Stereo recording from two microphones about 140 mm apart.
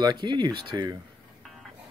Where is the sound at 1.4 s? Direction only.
Centre (ahead or behind).